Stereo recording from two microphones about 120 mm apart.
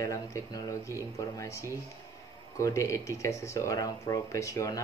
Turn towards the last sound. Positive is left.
turn(degrees=30)  # may be behind; listen again after turning